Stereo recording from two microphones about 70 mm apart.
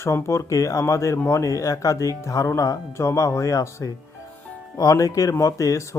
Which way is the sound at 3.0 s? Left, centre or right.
Left.